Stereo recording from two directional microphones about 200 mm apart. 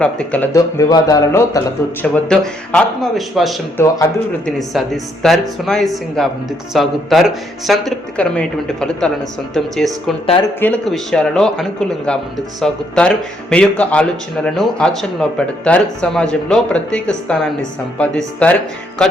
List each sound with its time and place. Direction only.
0.0 s a man's voice: 5° left (ahead or behind)
2.3 s a man's voice: 5° left (ahead or behind)
3.8 s a man's voice: 15° left (ahead or behind)
4.4 s a man's voice: centre (ahead or behind)
10.2 s speech: 25° left (ahead or behind)
10.6 s a man's voice: 5° left (ahead or behind)